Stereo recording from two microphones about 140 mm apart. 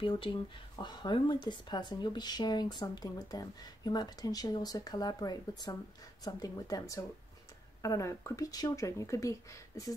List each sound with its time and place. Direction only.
0.0 s speech: 35° left (ahead or behind)